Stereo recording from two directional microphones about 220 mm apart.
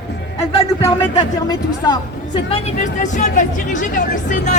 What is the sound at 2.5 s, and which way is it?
A man's voice, 35° left (ahead or behind).